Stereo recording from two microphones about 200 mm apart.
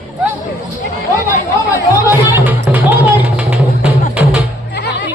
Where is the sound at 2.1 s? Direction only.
10° right (ahead or behind).